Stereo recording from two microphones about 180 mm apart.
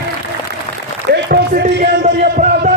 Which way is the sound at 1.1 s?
60° right (ahead or behind).